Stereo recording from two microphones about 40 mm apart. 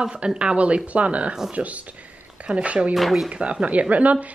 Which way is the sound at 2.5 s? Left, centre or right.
Right.